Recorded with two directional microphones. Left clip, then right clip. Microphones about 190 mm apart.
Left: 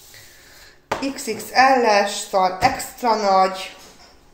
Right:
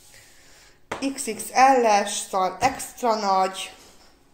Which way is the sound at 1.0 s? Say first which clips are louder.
Left 3 dB; 55° right (ahead or behind).